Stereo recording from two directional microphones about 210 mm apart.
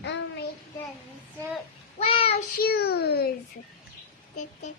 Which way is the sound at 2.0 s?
30° left (ahead or behind).